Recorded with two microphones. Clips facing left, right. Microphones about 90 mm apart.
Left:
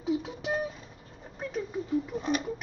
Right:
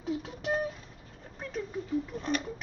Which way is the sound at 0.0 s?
5° left (ahead or behind).